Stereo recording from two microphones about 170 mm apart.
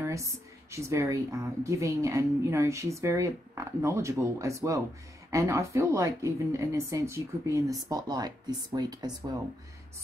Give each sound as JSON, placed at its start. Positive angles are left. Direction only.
{"t": 0.0, "sound": "a woman's voice", "side_deg": -15}